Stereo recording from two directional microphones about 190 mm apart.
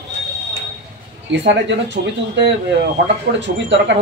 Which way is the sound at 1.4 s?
65° right (ahead or behind).